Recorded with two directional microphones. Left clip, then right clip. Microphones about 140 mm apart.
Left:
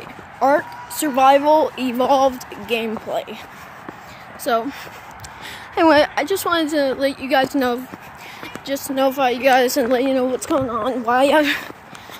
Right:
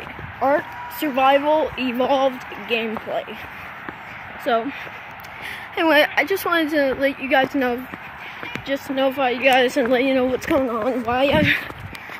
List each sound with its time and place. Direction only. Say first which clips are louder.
0.6 s speech: left 2 dB; 15° left (ahead or behind)
1.1 s speech: left 4 dB; 25° left (ahead or behind)
1.8 s speech: left 3 dB; 15° left (ahead or behind)
4.5 s speech: left 1 dB; 5° left (ahead or behind)
5.8 s speech: left 2 dB; 30° left (ahead or behind); by 8.9 s 5° left (ahead or behind)
8.9 s speech: left 3 dB; 15° left (ahead or behind)
10.7 s speech: left 1 dB; 10° right (ahead or behind)
11.1 s speech: left 3 dB; 25° left (ahead or behind)